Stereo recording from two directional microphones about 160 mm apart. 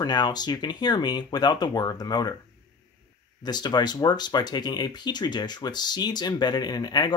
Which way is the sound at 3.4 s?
25° left (ahead or behind).